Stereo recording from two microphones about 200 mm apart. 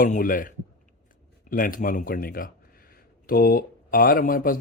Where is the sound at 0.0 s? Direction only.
45° left (ahead or behind).